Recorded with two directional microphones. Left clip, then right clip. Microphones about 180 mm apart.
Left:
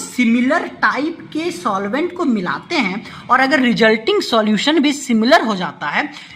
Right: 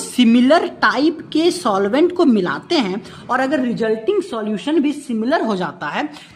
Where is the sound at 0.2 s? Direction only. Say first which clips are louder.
Right 3 dB; 35° right (ahead or behind); by 3.5 s 15° right (ahead or behind).